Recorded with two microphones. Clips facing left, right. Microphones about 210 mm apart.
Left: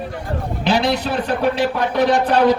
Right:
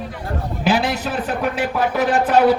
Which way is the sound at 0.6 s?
5° right (ahead or behind).